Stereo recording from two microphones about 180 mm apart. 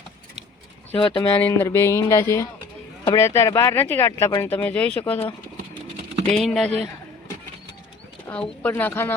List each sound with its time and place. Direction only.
0.9 s speech: 30° left (ahead or behind)
1.2 s speech: 10° left (ahead or behind)
6.3 s speech: centre (ahead or behind)
8.3 s speech: 10° left (ahead or behind)